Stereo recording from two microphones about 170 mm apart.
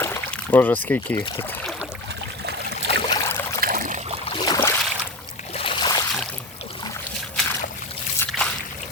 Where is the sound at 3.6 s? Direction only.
55° right (ahead or behind).